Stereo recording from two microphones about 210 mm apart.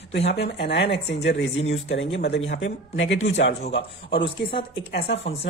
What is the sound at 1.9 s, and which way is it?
Speech, 60° left (ahead or behind).